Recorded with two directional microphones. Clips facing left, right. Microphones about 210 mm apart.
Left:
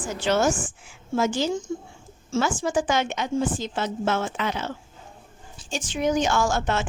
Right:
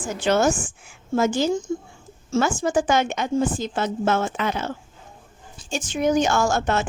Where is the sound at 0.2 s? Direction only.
50° right (ahead or behind).